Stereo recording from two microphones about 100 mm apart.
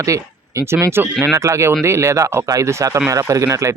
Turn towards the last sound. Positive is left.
turn(degrees=-30)  # may be behind; listen again after turning